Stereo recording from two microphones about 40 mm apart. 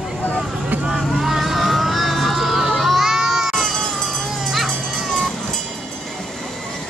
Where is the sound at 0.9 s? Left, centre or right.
Centre.